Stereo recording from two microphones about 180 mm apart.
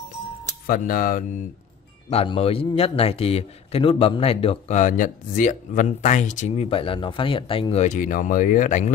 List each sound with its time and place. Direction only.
0.7 s speech: 50° left (ahead or behind)
2.0 s a man's voice: 35° left (ahead or behind)